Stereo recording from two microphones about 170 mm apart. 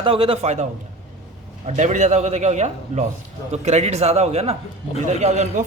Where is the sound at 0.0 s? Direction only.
35° right (ahead or behind).